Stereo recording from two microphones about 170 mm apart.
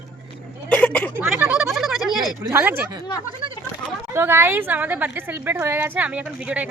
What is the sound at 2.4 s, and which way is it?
Speech, 15° right (ahead or behind).